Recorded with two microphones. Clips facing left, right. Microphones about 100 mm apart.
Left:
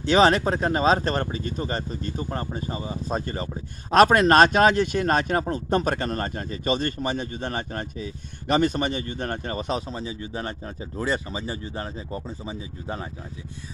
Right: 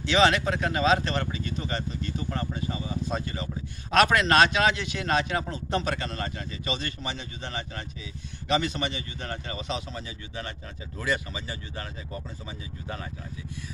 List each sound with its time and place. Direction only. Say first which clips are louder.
0.0 s speech: left 4 dB; 40° left (ahead or behind)